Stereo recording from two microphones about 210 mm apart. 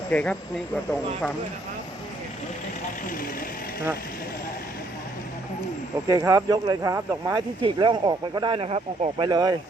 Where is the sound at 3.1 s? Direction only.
40° left (ahead or behind).